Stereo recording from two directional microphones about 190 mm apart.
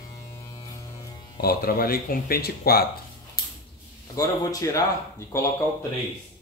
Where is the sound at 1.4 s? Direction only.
55° left (ahead or behind).